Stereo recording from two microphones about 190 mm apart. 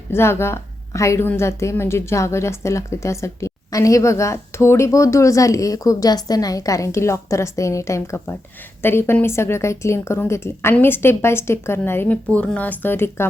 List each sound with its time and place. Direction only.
0.1 s a woman's voice: 15° left (ahead or behind)